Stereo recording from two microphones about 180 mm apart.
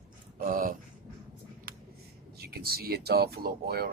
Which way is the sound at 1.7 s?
55° right (ahead or behind).